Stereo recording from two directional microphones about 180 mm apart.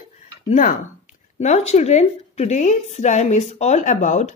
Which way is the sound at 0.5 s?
40° left (ahead or behind).